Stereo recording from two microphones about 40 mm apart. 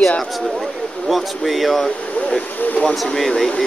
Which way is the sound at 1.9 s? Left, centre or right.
Left.